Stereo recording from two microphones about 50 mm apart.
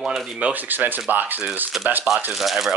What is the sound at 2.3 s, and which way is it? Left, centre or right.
Speech, centre.